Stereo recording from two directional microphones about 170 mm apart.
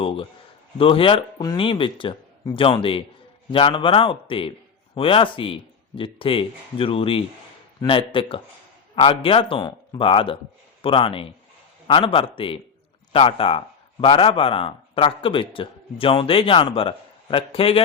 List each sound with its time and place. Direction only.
0.0 s a man's voice: 30° left (ahead or behind)